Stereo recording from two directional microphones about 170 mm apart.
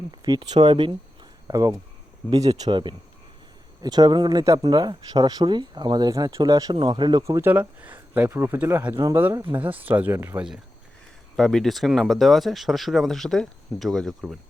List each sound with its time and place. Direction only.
0.1 s speech: 25° right (ahead or behind); by 14.3 s centre (ahead or behind)